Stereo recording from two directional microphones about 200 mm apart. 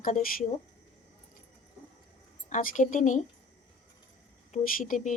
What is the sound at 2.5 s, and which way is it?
Speech, 40° left (ahead or behind).